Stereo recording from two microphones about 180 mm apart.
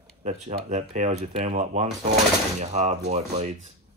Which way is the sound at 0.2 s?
40° right (ahead or behind).